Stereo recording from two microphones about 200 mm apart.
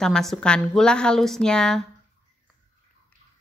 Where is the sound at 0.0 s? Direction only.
Centre (ahead or behind).